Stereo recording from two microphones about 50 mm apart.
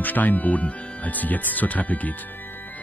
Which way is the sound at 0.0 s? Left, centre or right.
Left.